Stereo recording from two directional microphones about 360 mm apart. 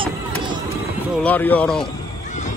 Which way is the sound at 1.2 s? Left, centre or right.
Centre.